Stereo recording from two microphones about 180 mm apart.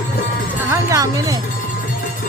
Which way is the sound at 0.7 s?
20° right (ahead or behind).